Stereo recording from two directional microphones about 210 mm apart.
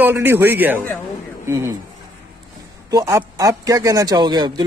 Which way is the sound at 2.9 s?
15° right (ahead or behind).